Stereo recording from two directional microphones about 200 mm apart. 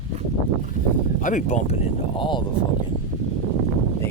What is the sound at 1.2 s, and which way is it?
Speech, 40° left (ahead or behind).